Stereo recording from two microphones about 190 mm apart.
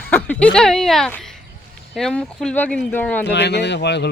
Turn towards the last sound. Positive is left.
turn(degrees=65)  # may be behind; listen again after turning